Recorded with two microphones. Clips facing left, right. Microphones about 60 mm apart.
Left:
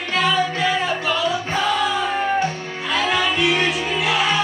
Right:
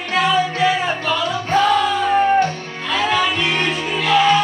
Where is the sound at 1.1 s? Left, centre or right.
Centre.